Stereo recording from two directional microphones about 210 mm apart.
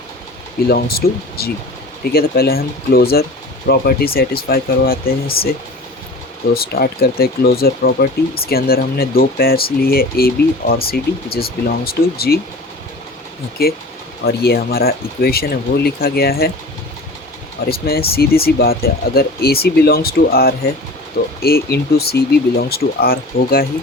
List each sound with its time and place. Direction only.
0.7 s speech: 45° left (ahead or behind)
14.3 s speech: 45° left (ahead or behind)
17.7 s speech: 45° left (ahead or behind)